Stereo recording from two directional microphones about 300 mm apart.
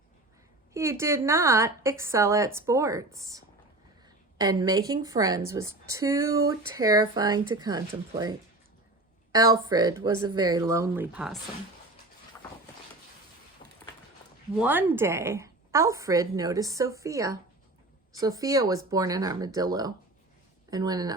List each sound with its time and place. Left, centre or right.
0.7 s speech: centre
13.6 s a sound: left
14.6 s speech: centre